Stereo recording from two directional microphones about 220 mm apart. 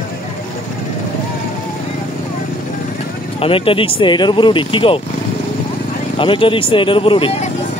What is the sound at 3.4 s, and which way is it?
Speech, 25° left (ahead or behind).